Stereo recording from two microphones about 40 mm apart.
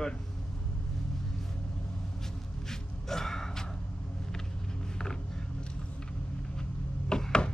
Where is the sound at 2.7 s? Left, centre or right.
Centre.